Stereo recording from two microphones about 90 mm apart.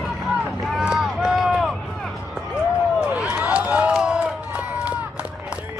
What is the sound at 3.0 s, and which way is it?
Run, 10° right (ahead or behind).